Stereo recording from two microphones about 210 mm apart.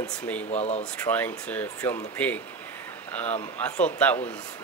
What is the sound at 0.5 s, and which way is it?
Speech, 30° left (ahead or behind).